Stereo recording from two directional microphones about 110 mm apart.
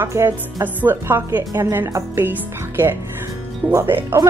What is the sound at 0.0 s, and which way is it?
A woman's voice, 25° right (ahead or behind).